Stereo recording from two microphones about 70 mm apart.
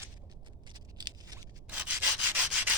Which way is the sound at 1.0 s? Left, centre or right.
Right.